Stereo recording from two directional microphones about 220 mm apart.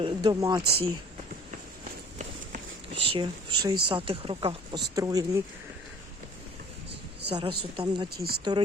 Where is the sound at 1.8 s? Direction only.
30° right (ahead or behind).